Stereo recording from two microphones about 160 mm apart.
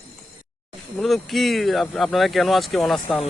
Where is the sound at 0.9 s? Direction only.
Centre (ahead or behind).